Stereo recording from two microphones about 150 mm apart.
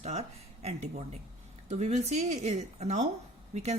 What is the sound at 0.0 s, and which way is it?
A woman's voice, 45° right (ahead or behind).